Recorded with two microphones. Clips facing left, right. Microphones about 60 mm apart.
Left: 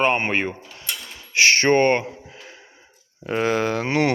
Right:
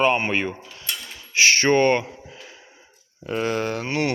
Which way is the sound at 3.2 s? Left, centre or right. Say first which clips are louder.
Left 3 dB; left.